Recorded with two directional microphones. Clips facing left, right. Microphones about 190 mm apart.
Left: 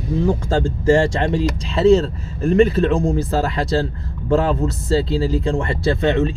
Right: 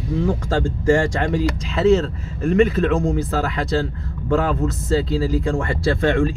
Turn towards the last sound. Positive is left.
turn(degrees=20)  # may be behind; listen again after turning